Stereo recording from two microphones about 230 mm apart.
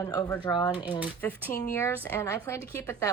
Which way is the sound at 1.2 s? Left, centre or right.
Centre.